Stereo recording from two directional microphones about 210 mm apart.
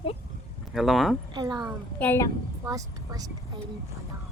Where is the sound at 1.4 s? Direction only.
15° right (ahead or behind).